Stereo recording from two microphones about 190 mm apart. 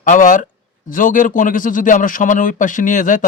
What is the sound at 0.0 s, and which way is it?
A man's voice, 45° left (ahead or behind).